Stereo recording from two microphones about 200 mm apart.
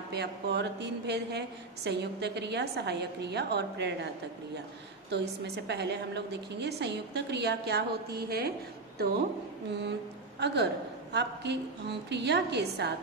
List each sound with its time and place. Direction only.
0.1 s a woman's voice: 55° right (ahead or behind)
5.1 s a woman's voice: 60° right (ahead or behind)
10.4 s a woman's voice: 55° right (ahead or behind)